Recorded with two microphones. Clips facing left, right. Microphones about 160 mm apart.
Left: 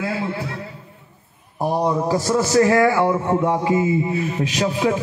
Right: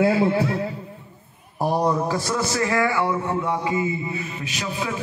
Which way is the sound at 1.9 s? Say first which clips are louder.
Left 3 dB; 15° left (ahead or behind).